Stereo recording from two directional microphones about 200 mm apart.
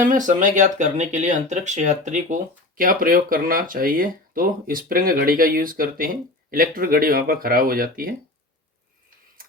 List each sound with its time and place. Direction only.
0.1 s speech: 40° right (ahead or behind)